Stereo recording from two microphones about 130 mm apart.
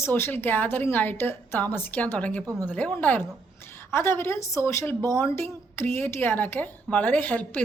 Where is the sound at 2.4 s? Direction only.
25° right (ahead or behind).